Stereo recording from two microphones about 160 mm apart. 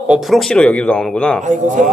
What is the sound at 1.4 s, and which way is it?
Speech, 50° right (ahead or behind).